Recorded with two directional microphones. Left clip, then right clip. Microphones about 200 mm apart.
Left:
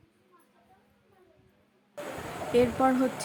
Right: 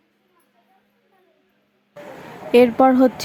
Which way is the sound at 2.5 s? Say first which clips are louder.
Right 11 dB; 40° right (ahead or behind).